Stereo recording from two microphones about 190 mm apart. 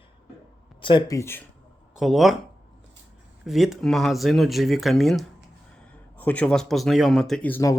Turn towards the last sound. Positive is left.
turn(degrees=5)  # may be behind; listen again after turning